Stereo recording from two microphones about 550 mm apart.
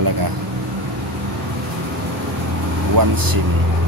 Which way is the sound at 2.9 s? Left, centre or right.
Right.